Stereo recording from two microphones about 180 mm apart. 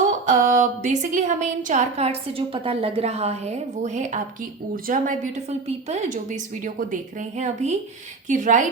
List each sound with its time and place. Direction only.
0.3 s a woman's voice: 45° right (ahead or behind)